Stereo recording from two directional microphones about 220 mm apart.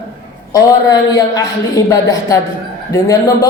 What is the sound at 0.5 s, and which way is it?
Speech, 15° left (ahead or behind).